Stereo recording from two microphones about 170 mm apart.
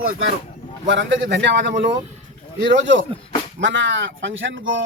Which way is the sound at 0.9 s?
90° right.